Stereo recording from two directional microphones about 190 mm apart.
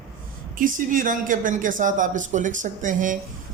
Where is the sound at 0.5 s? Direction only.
45° right (ahead or behind).